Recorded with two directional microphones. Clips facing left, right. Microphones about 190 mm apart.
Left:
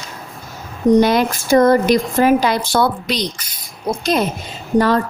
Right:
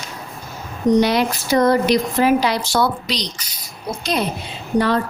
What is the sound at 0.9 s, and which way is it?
Speech, 50° left (ahead or behind).